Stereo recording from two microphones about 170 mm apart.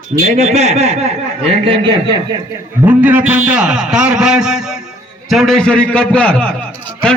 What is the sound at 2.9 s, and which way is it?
A man's voice, 10° right (ahead or behind).